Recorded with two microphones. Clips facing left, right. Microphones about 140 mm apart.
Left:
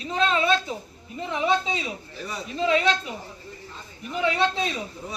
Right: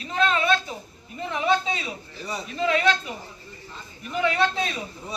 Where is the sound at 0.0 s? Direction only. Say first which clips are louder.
Even; 25° left (ahead or behind).